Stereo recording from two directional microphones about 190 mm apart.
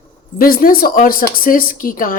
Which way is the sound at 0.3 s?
50° left (ahead or behind).